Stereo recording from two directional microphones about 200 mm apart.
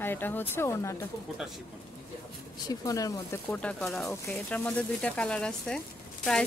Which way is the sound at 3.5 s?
5° left (ahead or behind).